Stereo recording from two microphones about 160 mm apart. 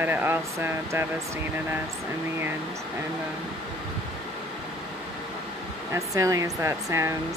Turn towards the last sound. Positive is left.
turn(degrees=-20)  # may be behind; listen again after turning